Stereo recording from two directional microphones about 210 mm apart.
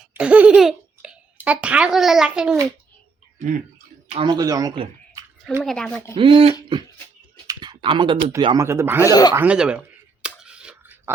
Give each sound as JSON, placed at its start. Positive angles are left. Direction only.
{"t": 0.1, "sound": "speech", "side_deg": -5}
{"t": 3.3, "sound": "chewing", "side_deg": -35}
{"t": 4.1, "sound": "speech", "side_deg": -20}
{"t": 5.6, "sound": "speech", "side_deg": 5}
{"t": 6.1, "sound": "speech", "side_deg": -25}
{"t": 7.4, "sound": "typing", "side_deg": -20}
{"t": 8.4, "sound": "speech", "side_deg": -25}
{"t": 8.6, "sound": "speech", "side_deg": -10}
{"t": 9.0, "sound": "speech", "side_deg": 20}
{"t": 9.3, "sound": "speech", "side_deg": -5}
{"t": 10.2, "sound": "a sound", "side_deg": -5}